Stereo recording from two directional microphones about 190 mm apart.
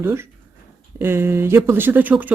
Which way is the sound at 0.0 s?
15° right (ahead or behind).